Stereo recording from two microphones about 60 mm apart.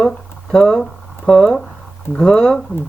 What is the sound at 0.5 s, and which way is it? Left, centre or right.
Speech, centre.